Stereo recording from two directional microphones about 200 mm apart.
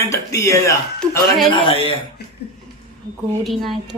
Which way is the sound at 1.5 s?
25° left (ahead or behind).